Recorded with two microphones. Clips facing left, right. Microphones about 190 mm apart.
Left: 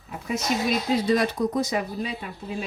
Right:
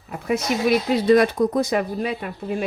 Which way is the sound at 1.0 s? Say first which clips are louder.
Right 6 dB; 55° right (ahead or behind).